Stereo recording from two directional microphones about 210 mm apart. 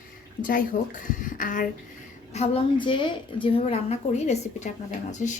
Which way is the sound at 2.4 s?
25° left (ahead or behind).